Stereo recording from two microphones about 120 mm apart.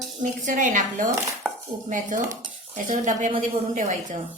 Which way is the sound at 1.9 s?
90° right.